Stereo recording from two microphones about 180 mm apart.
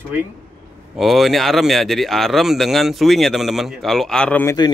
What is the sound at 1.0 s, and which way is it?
Speech, centre (ahead or behind).